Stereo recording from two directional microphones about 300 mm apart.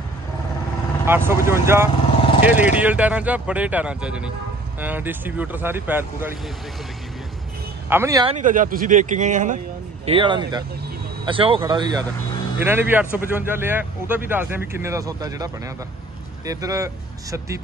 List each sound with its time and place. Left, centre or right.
1.0 s speech: centre
7.9 s speech: centre
8.4 s speech: right; by 17.6 s centre